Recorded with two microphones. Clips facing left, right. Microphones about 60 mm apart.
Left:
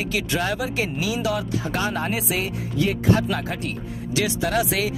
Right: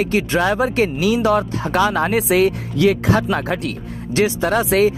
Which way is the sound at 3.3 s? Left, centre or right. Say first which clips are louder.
Right 6 dB; right.